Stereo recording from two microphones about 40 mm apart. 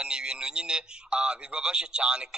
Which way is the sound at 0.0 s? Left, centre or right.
Right.